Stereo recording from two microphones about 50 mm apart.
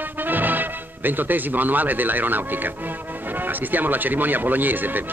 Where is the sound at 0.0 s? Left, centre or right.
Right.